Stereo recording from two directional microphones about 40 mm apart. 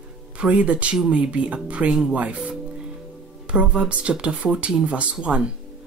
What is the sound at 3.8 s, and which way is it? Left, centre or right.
Speech, right.